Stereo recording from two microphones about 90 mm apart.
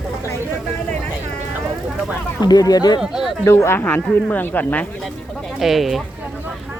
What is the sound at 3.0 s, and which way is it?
Speech, 5° right (ahead or behind).